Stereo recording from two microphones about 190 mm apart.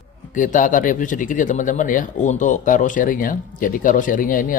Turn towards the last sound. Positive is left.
turn(degrees=45)  # may be behind; listen again after turning